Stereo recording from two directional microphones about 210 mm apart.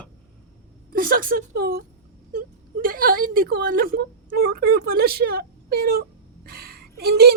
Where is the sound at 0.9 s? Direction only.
45° right (ahead or behind).